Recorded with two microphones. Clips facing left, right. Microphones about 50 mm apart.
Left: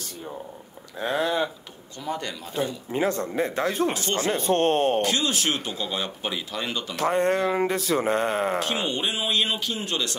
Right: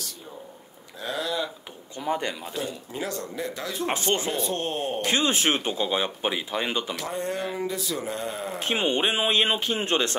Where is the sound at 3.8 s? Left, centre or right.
Right.